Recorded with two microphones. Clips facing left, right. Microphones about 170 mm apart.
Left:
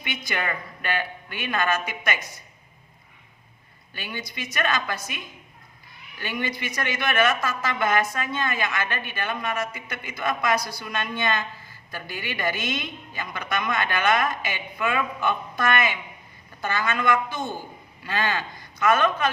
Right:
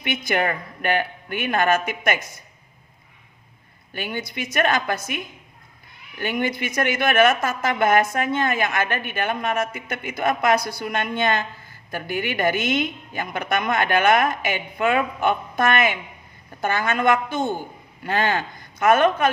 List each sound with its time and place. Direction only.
0.3 s a woman's voice: 55° right (ahead or behind)
3.9 s a woman's voice: 50° right (ahead or behind)
6.1 s a woman's voice: 50° right (ahead or behind)